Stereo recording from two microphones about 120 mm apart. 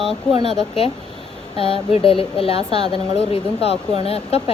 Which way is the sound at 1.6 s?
50° left (ahead or behind).